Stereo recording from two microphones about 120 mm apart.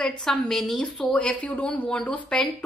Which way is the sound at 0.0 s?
5° left (ahead or behind).